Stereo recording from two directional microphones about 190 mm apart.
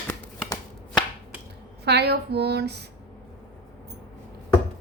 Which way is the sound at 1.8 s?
60° right (ahead or behind).